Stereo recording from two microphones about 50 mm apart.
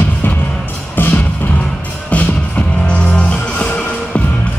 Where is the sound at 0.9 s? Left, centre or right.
Left.